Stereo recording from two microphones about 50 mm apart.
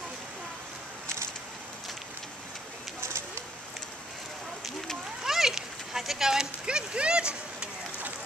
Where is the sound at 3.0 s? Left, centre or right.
Right.